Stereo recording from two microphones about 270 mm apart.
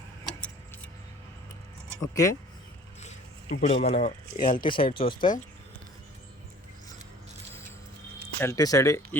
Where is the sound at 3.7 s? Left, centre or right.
Left.